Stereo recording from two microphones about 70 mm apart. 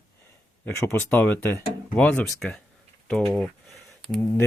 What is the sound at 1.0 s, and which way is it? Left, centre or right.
Speech, left.